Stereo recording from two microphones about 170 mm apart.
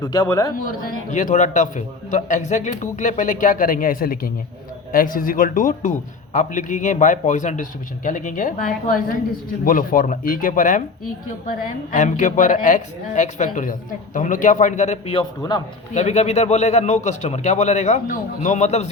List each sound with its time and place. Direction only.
0.0 s a man's voice: 20° left (ahead or behind)
1.1 s a man's voice: 45° left (ahead or behind)
11.9 s a man's voice: 50° left (ahead or behind); by 15.6 s 25° left (ahead or behind)
16.0 s a man's voice: 40° left (ahead or behind)